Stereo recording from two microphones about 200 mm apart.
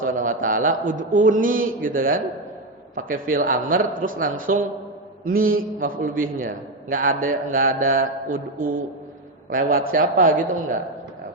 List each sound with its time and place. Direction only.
0.0 s a man's voice: 40° right (ahead or behind)